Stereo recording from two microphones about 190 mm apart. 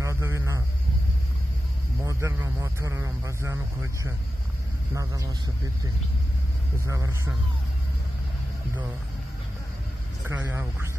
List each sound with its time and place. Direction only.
0.0 s a sound: 15° right (ahead or behind)
2.0 s speech: 15° right (ahead or behind)
6.9 s speech: 15° right (ahead or behind)
10.2 s speech: 15° right (ahead or behind)